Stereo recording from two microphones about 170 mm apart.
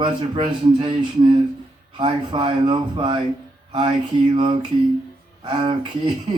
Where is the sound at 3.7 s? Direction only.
25° right (ahead or behind).